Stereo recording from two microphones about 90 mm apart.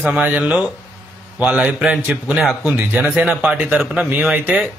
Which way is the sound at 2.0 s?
20° right (ahead or behind).